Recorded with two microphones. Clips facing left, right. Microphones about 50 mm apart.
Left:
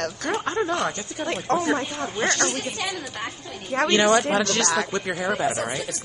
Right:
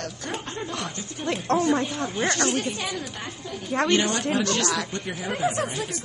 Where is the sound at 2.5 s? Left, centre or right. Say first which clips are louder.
Right 2 dB; left.